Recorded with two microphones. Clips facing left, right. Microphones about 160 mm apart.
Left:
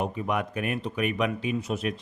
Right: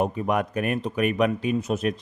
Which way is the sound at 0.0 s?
45° right (ahead or behind).